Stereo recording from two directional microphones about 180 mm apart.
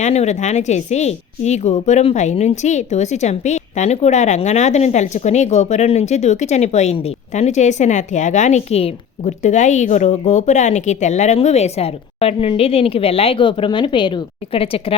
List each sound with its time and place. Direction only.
0.0 s a woman's voice: 40° left (ahead or behind)